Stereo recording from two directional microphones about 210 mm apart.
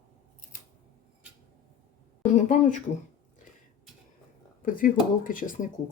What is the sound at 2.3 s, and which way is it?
Speech, 35° left (ahead or behind).